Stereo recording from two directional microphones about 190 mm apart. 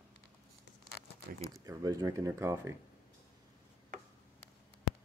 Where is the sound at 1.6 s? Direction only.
20° right (ahead or behind).